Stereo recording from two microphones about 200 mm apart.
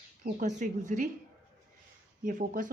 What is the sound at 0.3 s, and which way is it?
Speech, 40° right (ahead or behind).